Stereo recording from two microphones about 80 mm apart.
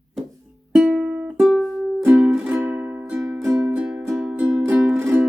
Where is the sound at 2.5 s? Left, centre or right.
Right.